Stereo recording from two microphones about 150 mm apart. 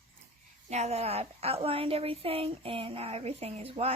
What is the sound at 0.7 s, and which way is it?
A woman's voice, 45° right (ahead or behind).